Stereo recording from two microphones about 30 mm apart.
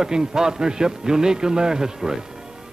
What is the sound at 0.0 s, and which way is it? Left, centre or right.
A man's voice, right.